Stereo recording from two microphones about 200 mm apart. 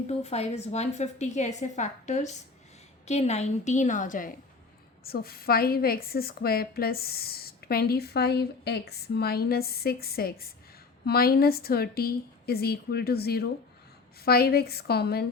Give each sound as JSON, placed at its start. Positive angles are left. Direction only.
{"t": 0.1, "sound": "a woman's voice", "side_deg": 30}